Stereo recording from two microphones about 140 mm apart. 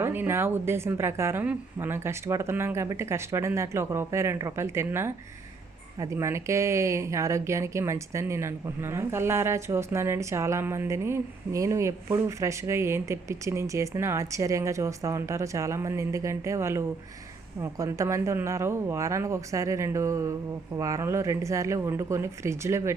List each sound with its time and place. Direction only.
0.0 s a woman's voice: 15° right (ahead or behind)